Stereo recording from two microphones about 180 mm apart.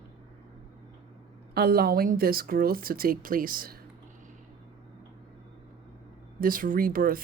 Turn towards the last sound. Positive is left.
turn(degrees=-50)  # may be behind; listen again after turning